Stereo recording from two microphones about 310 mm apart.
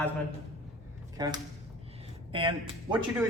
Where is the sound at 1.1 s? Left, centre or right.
Centre.